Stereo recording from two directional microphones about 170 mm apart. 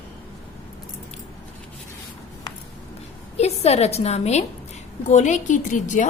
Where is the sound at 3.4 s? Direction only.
40° left (ahead or behind).